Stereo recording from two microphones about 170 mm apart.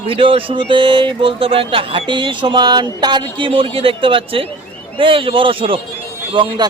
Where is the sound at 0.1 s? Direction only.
30° right (ahead or behind).